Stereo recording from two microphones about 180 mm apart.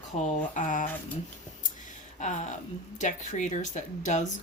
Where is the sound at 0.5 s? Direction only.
45° left (ahead or behind).